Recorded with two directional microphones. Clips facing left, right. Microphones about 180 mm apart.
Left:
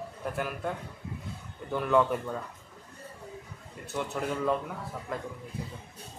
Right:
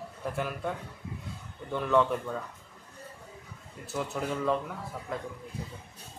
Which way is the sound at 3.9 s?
Centre (ahead or behind).